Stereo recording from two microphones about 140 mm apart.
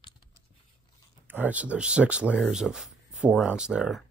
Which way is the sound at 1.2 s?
10° right (ahead or behind).